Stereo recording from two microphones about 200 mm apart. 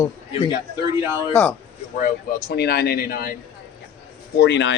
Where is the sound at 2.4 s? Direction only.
55° left (ahead or behind).